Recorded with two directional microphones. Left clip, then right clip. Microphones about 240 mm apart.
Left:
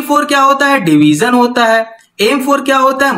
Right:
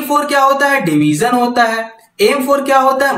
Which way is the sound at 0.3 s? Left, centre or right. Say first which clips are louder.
Left 2 dB; left.